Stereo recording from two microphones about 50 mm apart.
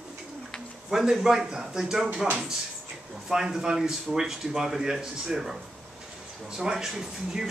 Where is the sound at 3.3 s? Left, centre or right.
Centre.